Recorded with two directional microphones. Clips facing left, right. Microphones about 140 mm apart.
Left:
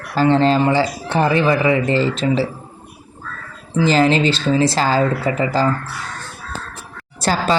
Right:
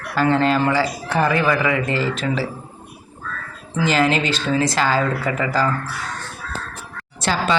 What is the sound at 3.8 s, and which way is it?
A man's voice, 30° left (ahead or behind).